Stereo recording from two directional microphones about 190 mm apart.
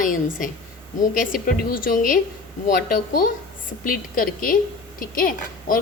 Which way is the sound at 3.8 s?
50° left (ahead or behind).